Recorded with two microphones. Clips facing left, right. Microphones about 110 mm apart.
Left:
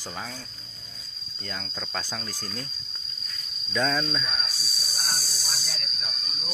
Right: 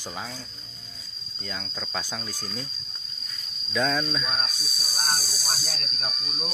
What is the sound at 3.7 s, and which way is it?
Speech, centre (ahead or behind).